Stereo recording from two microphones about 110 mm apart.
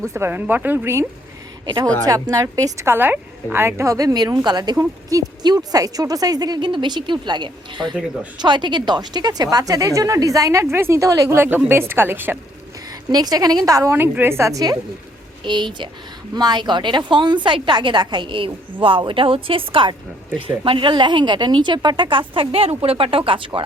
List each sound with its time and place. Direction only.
0.0 s speech: 25° right (ahead or behind)
1.6 s speech: 45° right (ahead or behind)
2.0 s a woman's voice: 35° right (ahead or behind)
13.1 s a woman's voice: 35° right (ahead or behind)
13.9 s speech: 20° right (ahead or behind)
15.4 s a woman's voice: 45° right (ahead or behind)